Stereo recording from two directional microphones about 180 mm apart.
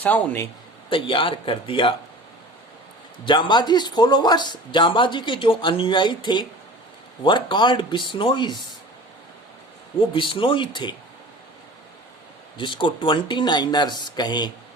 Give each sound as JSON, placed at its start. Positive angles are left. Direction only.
{"t": 0.0, "sound": "a man's voice", "side_deg": 10}
{"t": 0.9, "sound": "speech", "side_deg": 30}
{"t": 3.2, "sound": "speech", "side_deg": 25}
{"t": 10.1, "sound": "speech", "side_deg": 25}
{"t": 12.5, "sound": "speech", "side_deg": 25}